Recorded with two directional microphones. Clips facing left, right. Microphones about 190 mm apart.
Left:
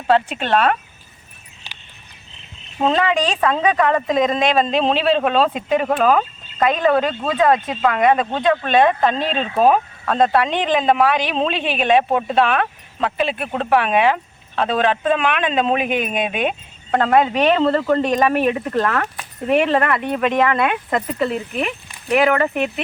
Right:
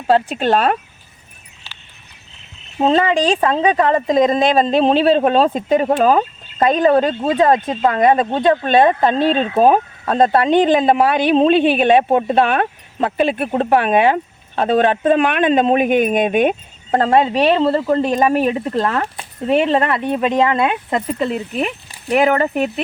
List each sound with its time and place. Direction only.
0.1 s speech: 40° right (ahead or behind)
2.7 s speech: 25° right (ahead or behind); by 16.6 s 50° right (ahead or behind)
16.9 s speech: 30° right (ahead or behind)